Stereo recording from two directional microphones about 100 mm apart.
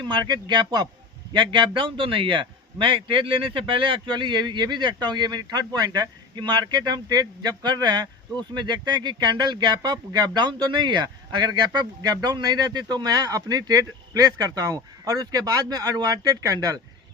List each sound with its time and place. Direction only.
0.1 s speech: 50° right (ahead or behind)